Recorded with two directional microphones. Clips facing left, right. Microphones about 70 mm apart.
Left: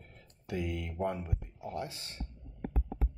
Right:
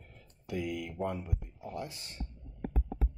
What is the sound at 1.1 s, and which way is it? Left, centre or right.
Speech, left.